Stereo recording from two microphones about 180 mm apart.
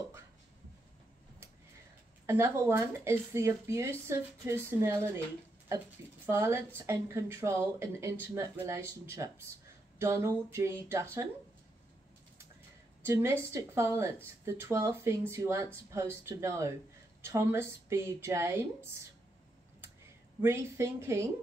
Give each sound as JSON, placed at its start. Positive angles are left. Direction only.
{"t": 2.2, "sound": "speech", "side_deg": -15}
{"t": 6.2, "sound": "speech", "side_deg": -15}
{"t": 13.0, "sound": "speech", "side_deg": -15}
{"t": 20.4, "sound": "speech", "side_deg": -15}